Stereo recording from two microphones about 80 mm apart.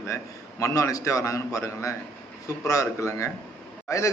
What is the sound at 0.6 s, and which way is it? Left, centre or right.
A man's voice, left.